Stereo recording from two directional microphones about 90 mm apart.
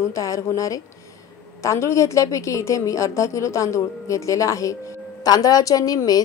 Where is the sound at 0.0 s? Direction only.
35° left (ahead or behind).